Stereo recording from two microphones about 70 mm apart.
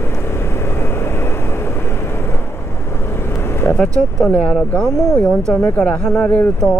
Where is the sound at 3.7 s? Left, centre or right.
Centre.